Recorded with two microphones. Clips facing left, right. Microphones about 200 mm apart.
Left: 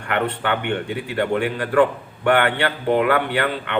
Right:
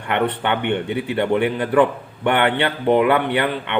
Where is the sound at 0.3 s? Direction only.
20° right (ahead or behind).